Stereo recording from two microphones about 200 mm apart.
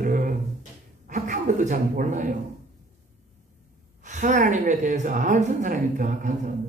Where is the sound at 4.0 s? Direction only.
40° right (ahead or behind).